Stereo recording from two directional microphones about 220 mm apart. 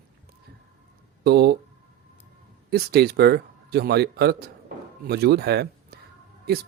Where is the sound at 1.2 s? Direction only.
45° right (ahead or behind).